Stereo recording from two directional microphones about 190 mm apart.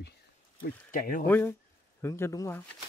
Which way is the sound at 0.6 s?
45° left (ahead or behind).